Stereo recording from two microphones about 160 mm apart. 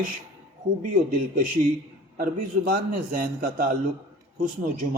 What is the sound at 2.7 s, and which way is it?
A man's voice, 60° right (ahead or behind).